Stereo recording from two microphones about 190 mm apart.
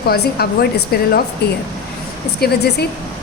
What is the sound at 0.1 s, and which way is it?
Speech, 55° left (ahead or behind).